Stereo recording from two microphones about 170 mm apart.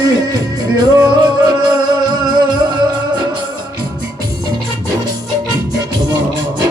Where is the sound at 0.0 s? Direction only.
20° right (ahead or behind).